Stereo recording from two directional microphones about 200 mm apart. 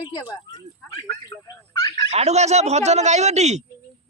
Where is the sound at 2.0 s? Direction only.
35° right (ahead or behind).